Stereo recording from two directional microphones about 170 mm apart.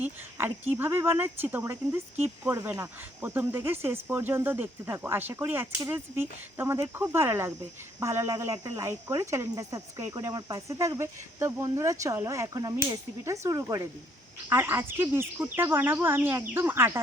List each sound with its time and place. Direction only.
0.0 s speech: 10° right (ahead or behind)